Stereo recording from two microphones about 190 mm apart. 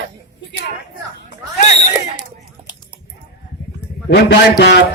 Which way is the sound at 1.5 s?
40° left (ahead or behind).